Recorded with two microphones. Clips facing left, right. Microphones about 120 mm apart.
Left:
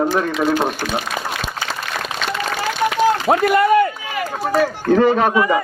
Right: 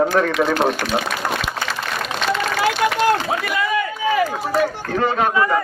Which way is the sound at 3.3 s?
55° left (ahead or behind).